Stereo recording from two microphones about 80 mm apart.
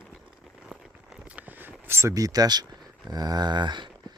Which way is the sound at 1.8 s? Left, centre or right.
Right.